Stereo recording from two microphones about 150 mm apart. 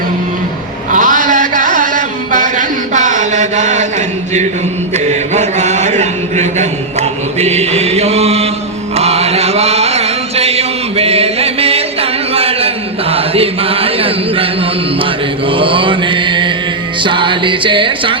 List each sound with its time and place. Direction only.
0.9 s a sound: 60° right (ahead or behind)
4.9 s mantra: 50° right (ahead or behind)
9.0 s chant: 45° right (ahead or behind)
15.4 s mantra: 35° right (ahead or behind)
17.0 s music: 35° right (ahead or behind)